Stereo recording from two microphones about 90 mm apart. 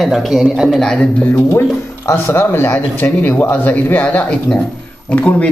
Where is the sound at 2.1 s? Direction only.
25° left (ahead or behind).